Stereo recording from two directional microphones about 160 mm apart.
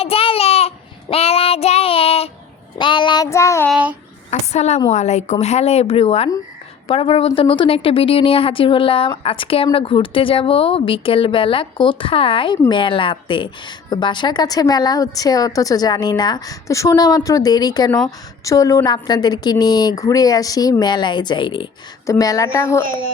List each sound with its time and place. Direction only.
0.0 s a sound: 35° left (ahead or behind)
1.1 s female singing: 40° left (ahead or behind)
2.7 s speech: 30° left (ahead or behind)
3.7 s child singing: 10° right (ahead or behind)
4.3 s a woman's voice: 45° left (ahead or behind)
22.0 s a woman's voice: 20° left (ahead or behind)